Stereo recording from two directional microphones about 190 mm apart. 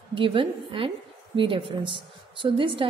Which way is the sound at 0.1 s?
25° right (ahead or behind).